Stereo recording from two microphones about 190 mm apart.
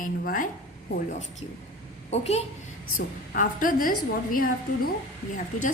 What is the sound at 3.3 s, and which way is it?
Speech, 45° left (ahead or behind).